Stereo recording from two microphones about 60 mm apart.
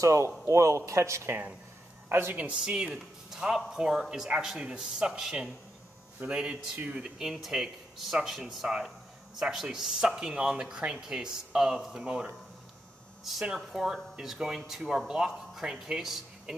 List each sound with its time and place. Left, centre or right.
0.0 s a man's voice: right
2.0 s speech: right
2.3 s speech: centre
13.2 s speech: centre